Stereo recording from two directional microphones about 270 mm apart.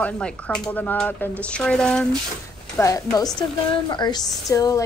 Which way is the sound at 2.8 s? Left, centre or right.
Centre.